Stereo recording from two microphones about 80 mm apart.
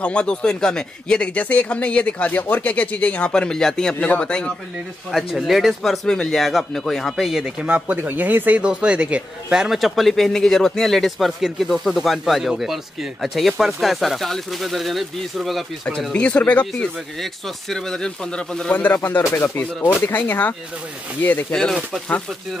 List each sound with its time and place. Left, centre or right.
0.0 s speech: centre
5.1 s speech: centre
8.0 s speech: right; by 15.6 s centre
16.1 s speech: centre
17.2 s speech: centre
18.7 s speech: left